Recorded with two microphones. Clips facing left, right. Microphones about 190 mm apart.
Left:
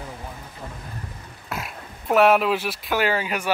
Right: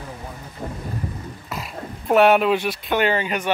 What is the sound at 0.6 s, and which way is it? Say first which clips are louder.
Thunder: right 7 dB; 30° right (ahead or behind).